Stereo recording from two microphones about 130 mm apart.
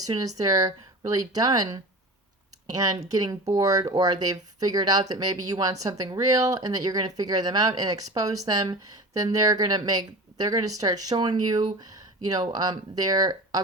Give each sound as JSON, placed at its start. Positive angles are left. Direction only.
{"t": 0.1, "sound": "speech", "side_deg": -30}